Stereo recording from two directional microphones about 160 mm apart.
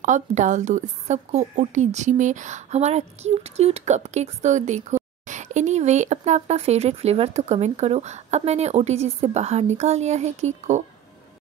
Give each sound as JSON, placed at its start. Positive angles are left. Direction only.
{"t": 0.0, "sound": "a woman's voice", "side_deg": -50}